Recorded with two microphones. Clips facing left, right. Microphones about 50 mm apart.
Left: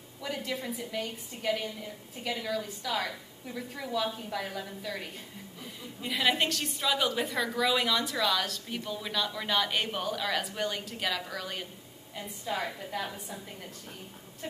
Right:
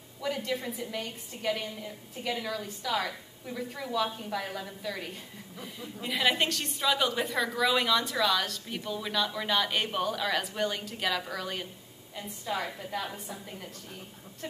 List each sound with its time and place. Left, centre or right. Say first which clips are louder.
0.2 s a woman's voice: right 3 dB; centre